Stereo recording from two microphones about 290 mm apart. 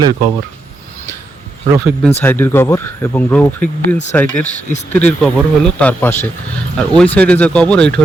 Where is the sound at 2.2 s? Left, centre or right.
Centre.